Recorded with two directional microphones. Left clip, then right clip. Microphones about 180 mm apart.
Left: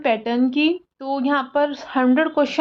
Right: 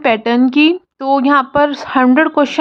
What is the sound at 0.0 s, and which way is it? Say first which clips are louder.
Speech: right 7 dB; 25° right (ahead or behind).